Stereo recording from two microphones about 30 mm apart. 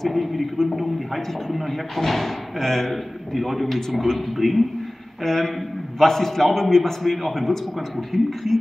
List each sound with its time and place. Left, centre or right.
0.0 s a man's voice: centre
3.3 s a man's voice: centre